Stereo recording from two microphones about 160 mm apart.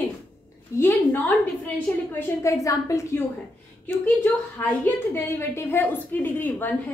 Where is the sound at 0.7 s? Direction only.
15° left (ahead or behind).